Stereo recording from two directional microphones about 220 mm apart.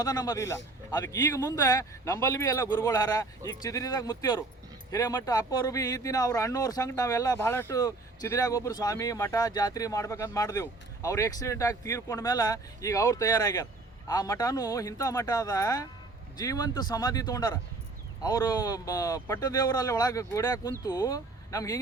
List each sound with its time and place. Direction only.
0.0 s speech: 15° left (ahead or behind)